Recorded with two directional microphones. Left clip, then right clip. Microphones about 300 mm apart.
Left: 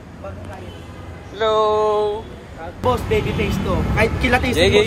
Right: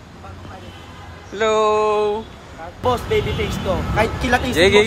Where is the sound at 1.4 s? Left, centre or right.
Centre.